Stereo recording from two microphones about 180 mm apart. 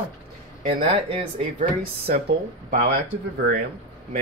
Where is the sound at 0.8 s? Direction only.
30° right (ahead or behind).